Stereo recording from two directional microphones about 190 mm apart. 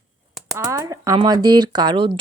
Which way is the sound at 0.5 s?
15° right (ahead or behind).